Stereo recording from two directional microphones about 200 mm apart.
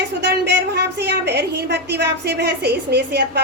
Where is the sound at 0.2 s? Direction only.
55° right (ahead or behind).